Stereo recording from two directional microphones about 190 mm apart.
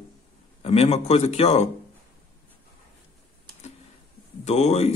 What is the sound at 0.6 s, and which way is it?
Speech, 30° left (ahead or behind).